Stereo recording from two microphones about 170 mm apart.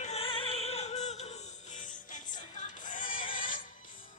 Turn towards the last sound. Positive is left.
turn(degrees=50)  # may be behind; listen again after turning